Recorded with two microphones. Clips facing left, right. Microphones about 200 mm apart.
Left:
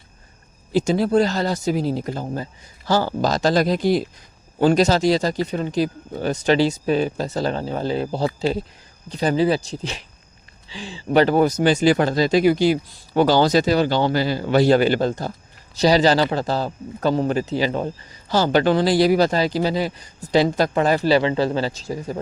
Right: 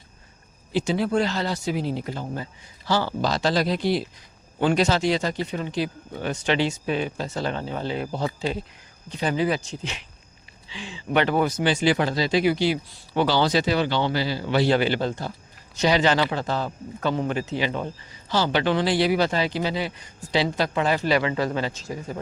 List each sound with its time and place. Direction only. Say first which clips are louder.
0.7 s speech: left 5 dB; 40° left (ahead or behind)